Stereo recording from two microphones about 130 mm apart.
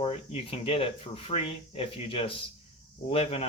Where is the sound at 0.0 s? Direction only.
45° left (ahead or behind).